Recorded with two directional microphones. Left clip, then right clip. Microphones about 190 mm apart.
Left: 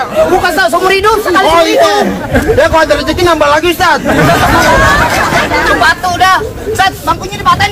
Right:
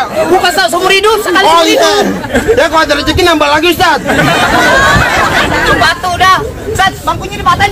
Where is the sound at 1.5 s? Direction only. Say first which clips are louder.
Even; 65° right (ahead or behind).